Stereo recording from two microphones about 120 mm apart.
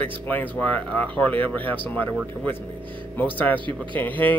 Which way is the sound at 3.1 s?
15° left (ahead or behind).